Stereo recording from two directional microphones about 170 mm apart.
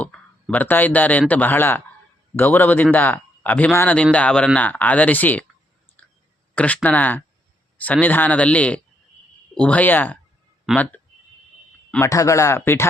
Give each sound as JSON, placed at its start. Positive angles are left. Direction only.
{"t": 0.0, "sound": "speech", "side_deg": 5}
{"t": 6.0, "sound": "clicking", "side_deg": 10}
{"t": 6.5, "sound": "speech", "side_deg": 10}
{"t": 10.7, "sound": "speech", "side_deg": 0}
{"t": 11.9, "sound": "speech", "side_deg": 20}